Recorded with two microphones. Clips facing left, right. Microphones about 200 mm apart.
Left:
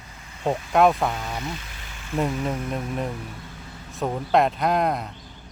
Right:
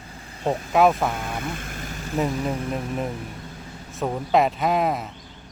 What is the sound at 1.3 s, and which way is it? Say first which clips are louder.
Vehicle: right 2 dB; 50° right (ahead or behind).